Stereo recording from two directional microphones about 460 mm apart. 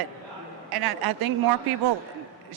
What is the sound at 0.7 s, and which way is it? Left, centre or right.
Speech, right.